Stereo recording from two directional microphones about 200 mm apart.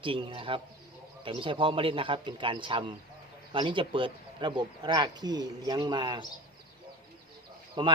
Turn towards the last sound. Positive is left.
turn(degrees=-20)  # may be behind; listen again after turning